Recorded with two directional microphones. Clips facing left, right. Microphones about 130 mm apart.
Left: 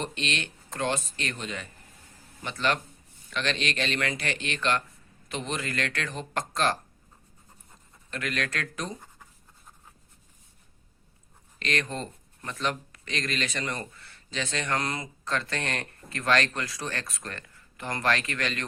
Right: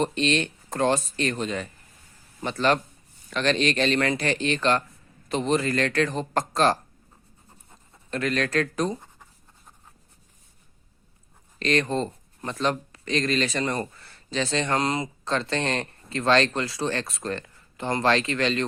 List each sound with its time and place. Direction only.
0.0 s speech: 35° right (ahead or behind)
8.1 s speech: 35° right (ahead or behind)
11.6 s speech: 35° right (ahead or behind)